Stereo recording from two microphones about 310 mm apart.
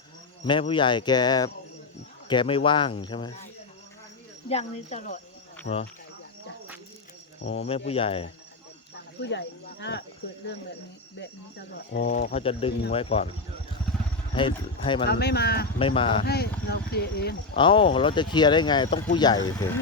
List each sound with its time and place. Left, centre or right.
0.4 s speech: centre
7.4 s speech: centre
9.2 s speech: left
11.9 s speech: left
14.3 s speech: centre
15.0 s speech: left
15.8 s speech: centre
16.2 s speech: left
17.6 s speech: centre